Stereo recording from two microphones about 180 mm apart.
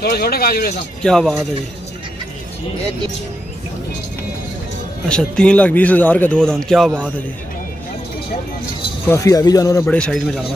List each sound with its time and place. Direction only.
0.0 s speech: 60° left (ahead or behind)
1.0 s speech: centre (ahead or behind)
5.0 s a man's voice: 5° left (ahead or behind)
9.1 s speech: 20° left (ahead or behind)
9.8 s speech: 5° left (ahead or behind)